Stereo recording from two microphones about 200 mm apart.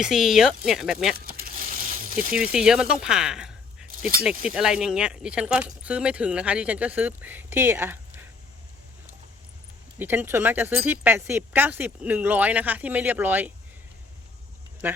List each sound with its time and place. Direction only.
0.0 s speech: centre (ahead or behind)
1.3 s coin: 45° right (ahead or behind)
2.3 s speech: 5° right (ahead or behind)
10.0 s speech: 10° right (ahead or behind)
14.8 s speech: 10° right (ahead or behind)